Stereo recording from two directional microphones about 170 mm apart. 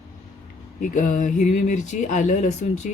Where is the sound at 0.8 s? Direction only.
50° left (ahead or behind).